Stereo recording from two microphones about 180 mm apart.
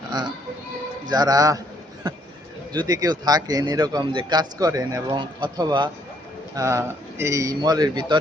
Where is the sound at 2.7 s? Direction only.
20° right (ahead or behind).